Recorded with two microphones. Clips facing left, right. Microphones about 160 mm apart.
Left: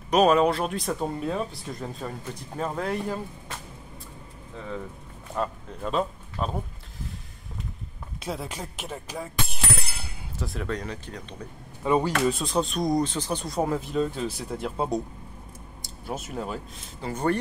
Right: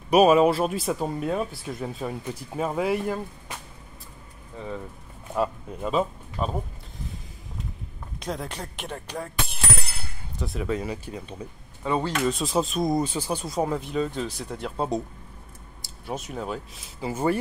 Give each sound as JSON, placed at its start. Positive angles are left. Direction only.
{"t": 0.1, "sound": "speech", "side_deg": -10}
{"t": 5.3, "sound": "speech", "side_deg": -10}
{"t": 8.2, "sound": "speech", "side_deg": 5}
{"t": 11.8, "sound": "speech", "side_deg": 15}
{"t": 12.4, "sound": "speech", "side_deg": 0}
{"t": 16.1, "sound": "speech", "side_deg": 0}